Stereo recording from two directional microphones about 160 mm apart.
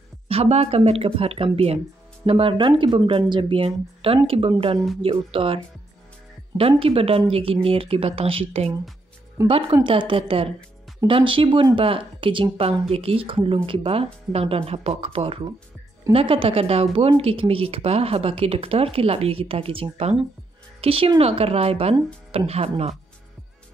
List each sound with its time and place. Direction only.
0.3 s speech: 40° right (ahead or behind)
6.8 s speech: 35° right (ahead or behind)
21.9 s speech: 25° right (ahead or behind)
22.5 s speech: 40° right (ahead or behind)